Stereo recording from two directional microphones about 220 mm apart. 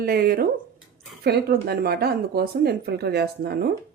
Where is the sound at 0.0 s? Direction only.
45° right (ahead or behind).